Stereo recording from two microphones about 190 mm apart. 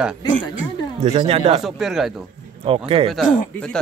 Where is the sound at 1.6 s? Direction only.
Centre (ahead or behind).